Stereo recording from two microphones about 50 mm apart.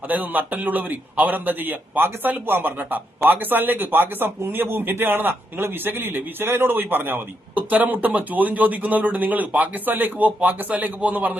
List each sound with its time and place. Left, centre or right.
0.1 s speech: right